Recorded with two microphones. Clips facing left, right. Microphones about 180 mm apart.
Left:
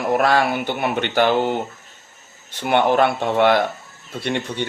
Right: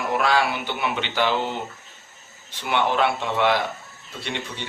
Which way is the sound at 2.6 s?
50° left (ahead or behind).